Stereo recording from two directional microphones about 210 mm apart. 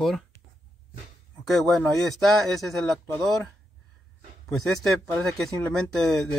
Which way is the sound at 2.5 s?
Centre (ahead or behind).